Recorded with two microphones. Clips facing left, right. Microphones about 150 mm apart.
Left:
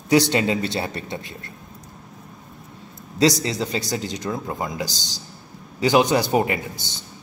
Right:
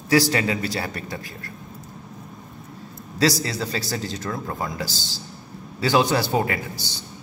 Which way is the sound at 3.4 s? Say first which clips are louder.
Left 2 dB; 20° left (ahead or behind).